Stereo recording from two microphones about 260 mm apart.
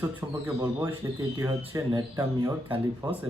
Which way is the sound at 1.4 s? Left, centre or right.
Right.